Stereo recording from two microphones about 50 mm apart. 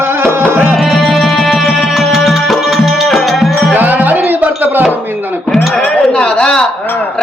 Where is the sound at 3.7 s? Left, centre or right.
Right.